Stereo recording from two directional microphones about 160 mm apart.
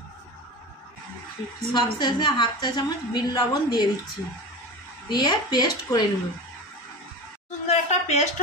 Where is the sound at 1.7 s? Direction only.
30° left (ahead or behind).